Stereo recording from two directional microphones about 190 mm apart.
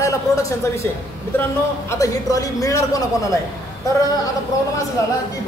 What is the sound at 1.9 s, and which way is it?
A man's voice, 15° left (ahead or behind).